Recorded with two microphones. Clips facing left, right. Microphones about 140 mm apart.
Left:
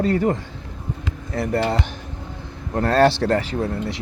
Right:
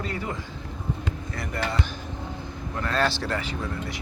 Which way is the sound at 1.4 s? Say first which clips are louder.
Left 9 dB; 35° left (ahead or behind).